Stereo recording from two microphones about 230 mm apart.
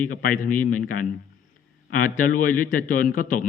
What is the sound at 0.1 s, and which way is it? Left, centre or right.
A man's voice, left.